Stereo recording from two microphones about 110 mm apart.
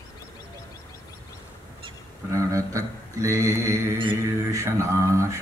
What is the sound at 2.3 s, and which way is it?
Mantra, 30° right (ahead or behind).